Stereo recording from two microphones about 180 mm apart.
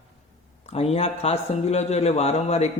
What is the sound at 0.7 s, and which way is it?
A man's voice, 35° left (ahead or behind).